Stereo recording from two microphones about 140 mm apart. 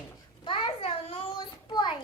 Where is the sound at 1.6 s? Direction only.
35° left (ahead or behind).